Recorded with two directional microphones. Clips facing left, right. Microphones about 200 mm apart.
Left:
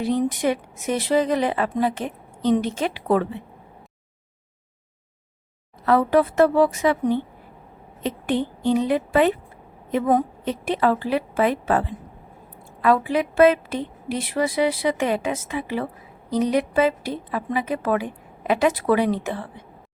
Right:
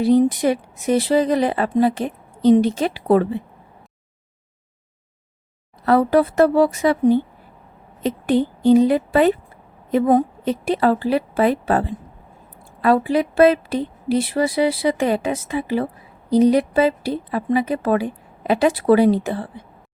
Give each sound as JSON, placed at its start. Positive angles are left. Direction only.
{"t": 0.0, "sound": "a woman's voice", "side_deg": -35}
{"t": 5.8, "sound": "a woman's voice", "side_deg": -35}